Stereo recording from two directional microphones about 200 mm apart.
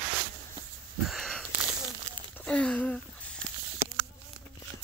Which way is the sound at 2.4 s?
5° left (ahead or behind).